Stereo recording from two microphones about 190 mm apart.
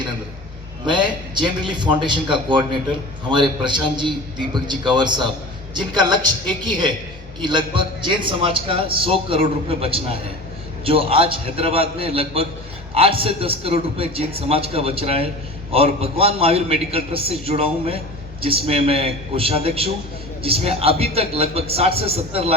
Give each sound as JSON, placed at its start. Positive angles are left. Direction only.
{"t": 0.9, "sound": "a man's voice", "side_deg": -25}